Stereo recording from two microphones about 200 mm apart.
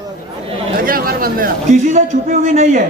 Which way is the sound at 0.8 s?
45° right (ahead or behind).